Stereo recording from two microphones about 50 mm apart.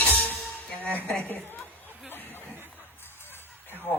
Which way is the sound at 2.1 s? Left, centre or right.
Left.